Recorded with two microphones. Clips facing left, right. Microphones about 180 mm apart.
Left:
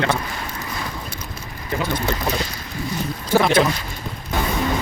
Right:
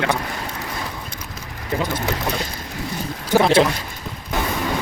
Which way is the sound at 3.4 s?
30° right (ahead or behind).